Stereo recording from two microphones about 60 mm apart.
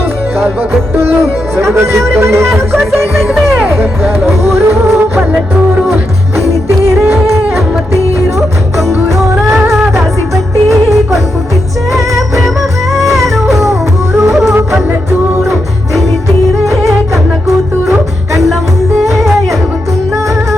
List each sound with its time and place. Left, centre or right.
1.5 s speech: right
3.8 s music: right
6.7 s music: right
13.0 s music: centre
19.1 s music: centre